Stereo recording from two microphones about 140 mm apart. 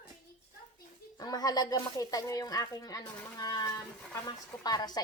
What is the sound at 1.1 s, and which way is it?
Speech, 30° left (ahead or behind).